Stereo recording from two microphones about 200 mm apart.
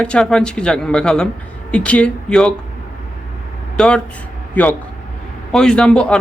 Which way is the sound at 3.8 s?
5° left (ahead or behind).